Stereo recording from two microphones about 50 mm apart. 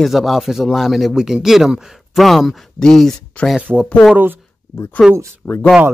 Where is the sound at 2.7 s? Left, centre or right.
Centre.